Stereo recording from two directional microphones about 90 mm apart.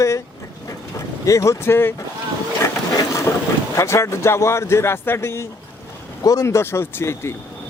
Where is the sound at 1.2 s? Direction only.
35° left (ahead or behind).